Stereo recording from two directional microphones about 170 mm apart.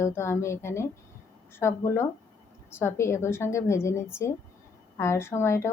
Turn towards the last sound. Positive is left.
turn(degrees=15)  # may be behind; listen again after turning